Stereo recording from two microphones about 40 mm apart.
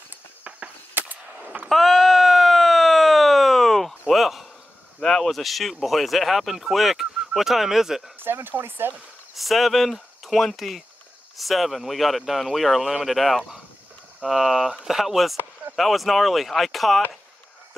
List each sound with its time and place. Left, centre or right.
0.4 s cricket: right
1.0 s gunshot: right
1.7 s a sound: centre
5.0 s speech: centre
8.2 s speech: right
9.3 s speech: centre